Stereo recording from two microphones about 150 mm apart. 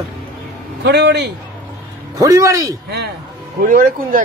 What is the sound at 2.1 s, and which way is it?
Speech, 20° right (ahead or behind).